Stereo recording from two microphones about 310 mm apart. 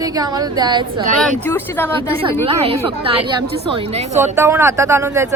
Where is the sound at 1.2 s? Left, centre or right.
Centre.